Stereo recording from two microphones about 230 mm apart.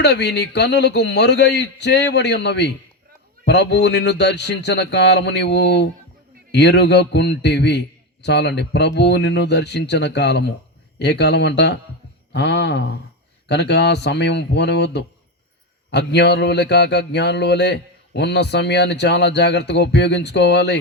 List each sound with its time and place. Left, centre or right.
0.0 s mantra: left
15.9 s mantra: left